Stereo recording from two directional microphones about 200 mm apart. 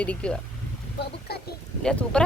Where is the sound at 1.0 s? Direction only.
55° left (ahead or behind).